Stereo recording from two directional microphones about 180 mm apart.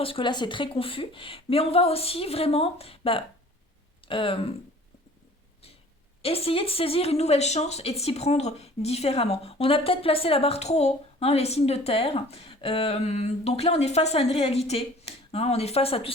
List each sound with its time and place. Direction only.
0.0 s speech: 30° left (ahead or behind)
6.2 s speech: 30° left (ahead or behind)